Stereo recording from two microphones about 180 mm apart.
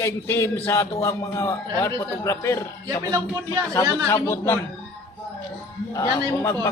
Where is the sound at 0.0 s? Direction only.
15° left (ahead or behind).